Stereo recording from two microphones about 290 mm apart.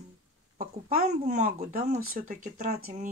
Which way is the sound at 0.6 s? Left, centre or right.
Right.